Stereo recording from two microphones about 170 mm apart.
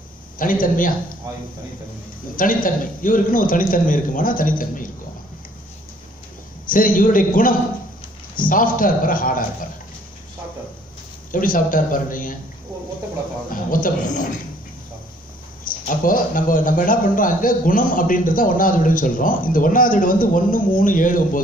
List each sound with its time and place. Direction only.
0.4 s a man's voice: 55° left (ahead or behind)
2.3 s a man's voice: 55° left (ahead or behind)
6.7 s a man's voice: 55° left (ahead or behind)
11.3 s a man's voice: 55° left (ahead or behind)
13.5 s a man's voice: 55° left (ahead or behind)
15.6 s a man's voice: 55° left (ahead or behind)